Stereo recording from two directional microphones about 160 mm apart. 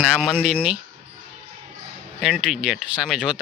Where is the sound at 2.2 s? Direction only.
Centre (ahead or behind).